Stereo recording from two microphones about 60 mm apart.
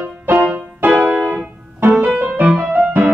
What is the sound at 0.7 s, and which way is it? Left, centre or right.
Music, right.